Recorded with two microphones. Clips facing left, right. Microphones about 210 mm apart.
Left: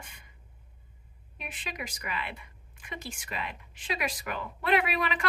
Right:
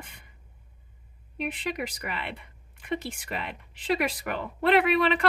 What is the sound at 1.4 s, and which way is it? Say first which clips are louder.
A woman's voice: right 9 dB; 60° right (ahead or behind).